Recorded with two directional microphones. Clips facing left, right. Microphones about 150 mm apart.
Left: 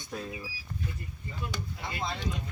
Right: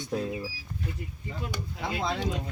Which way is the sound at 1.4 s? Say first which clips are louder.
Right 3 dB; 90° right.